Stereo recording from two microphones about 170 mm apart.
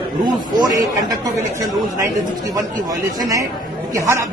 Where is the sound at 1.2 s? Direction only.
20° right (ahead or behind).